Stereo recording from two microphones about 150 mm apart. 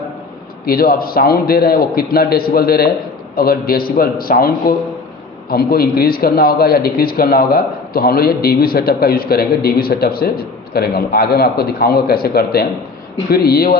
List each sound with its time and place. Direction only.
0.6 s a man's voice: 85° left